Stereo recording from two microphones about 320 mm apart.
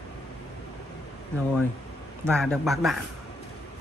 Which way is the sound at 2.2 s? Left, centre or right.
Centre.